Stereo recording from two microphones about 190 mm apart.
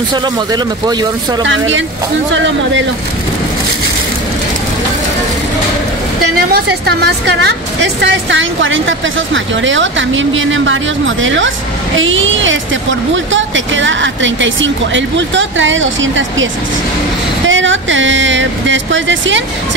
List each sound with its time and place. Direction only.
0.1 s speech: 20° right (ahead or behind)
1.4 s a woman's voice: 75° right (ahead or behind)
6.5 s a woman's voice: 60° right (ahead or behind); by 12.5 s 90° right
13.1 s speech: 75° right (ahead or behind)
17.5 s a woman's voice: 80° right